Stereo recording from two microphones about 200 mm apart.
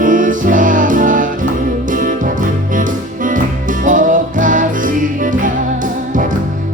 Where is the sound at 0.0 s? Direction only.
40° right (ahead or behind).